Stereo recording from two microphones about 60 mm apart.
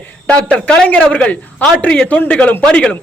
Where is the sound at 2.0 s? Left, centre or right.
Left.